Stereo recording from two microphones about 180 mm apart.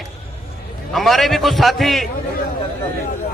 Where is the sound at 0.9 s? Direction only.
Centre (ahead or behind).